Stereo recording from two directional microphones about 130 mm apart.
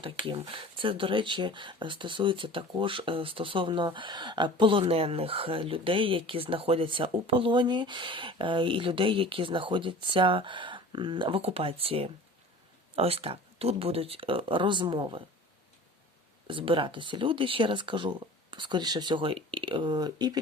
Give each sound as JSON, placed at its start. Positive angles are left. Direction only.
{"t": 0.0, "sound": "speech", "side_deg": -40}
{"t": 16.5, "sound": "speech", "side_deg": -40}